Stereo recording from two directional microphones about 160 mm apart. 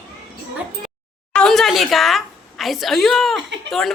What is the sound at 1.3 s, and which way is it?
A woman's voice, 5° left (ahead or behind).